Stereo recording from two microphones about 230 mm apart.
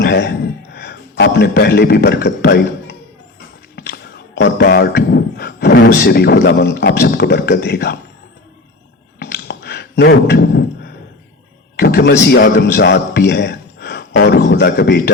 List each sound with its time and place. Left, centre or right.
0.0 s a man's voice: left
3.8 s a man's voice: left
9.1 s a sound: left
11.8 s a man's voice: left